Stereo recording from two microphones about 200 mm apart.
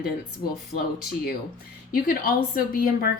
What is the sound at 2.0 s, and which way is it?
A woman's voice, 45° left (ahead or behind).